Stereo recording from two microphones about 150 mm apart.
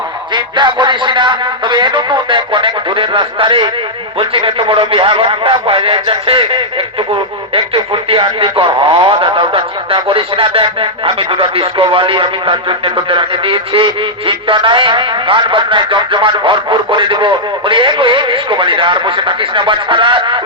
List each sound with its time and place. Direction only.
0.3 s a man's voice: 30° right (ahead or behind)